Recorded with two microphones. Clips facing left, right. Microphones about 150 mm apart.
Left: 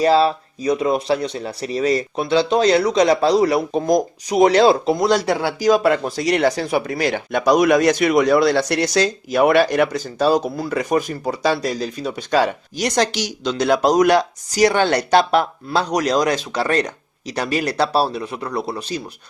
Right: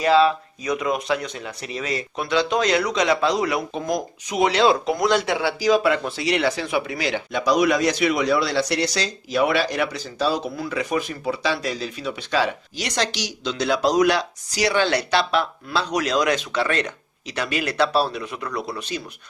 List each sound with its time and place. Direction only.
0.0 s speech: 35° left (ahead or behind)